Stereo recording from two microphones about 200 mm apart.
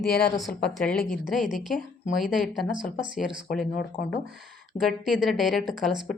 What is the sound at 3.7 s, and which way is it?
Speech, 40° left (ahead or behind).